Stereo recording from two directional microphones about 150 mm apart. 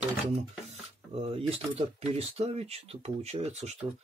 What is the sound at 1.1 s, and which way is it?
Speech, 40° right (ahead or behind).